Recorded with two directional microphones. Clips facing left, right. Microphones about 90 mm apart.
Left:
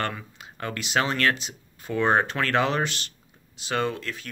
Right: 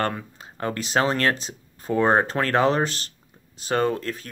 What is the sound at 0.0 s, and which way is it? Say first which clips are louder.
Speech: right 4 dB; 35° right (ahead or behind).